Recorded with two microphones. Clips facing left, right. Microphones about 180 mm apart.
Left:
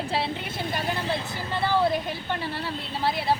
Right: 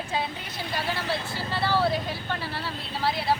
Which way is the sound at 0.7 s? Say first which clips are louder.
Even; 20° left (ahead or behind).